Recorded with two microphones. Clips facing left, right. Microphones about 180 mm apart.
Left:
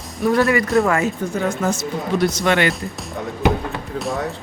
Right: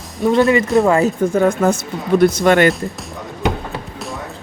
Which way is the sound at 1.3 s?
55° right (ahead or behind).